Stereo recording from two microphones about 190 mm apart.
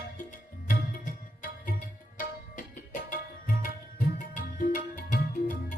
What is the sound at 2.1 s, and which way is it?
Tabla, 45° left (ahead or behind).